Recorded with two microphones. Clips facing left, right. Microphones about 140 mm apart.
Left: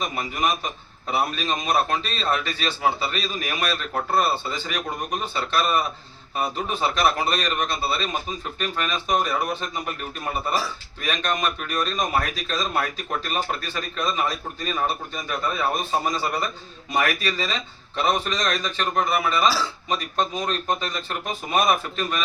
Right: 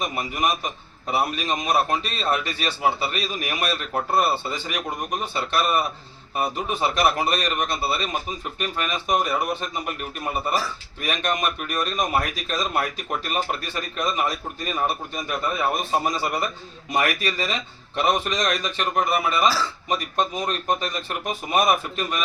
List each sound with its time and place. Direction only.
0.0 s a man's voice: 10° right (ahead or behind)